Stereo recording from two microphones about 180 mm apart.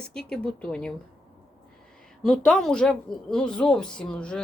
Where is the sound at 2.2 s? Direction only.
Centre (ahead or behind).